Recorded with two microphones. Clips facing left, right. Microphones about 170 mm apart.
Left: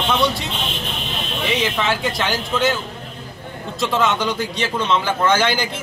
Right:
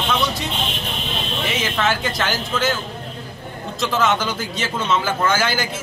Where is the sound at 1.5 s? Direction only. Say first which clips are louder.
Left 1 dB; centre (ahead or behind).